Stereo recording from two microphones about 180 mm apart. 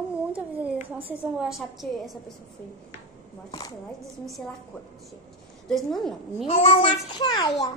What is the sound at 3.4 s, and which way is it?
Speech, 25° left (ahead or behind).